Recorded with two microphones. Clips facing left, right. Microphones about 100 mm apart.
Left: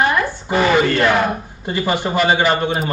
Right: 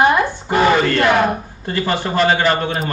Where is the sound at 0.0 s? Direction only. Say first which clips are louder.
Right 3 dB; 20° right (ahead or behind).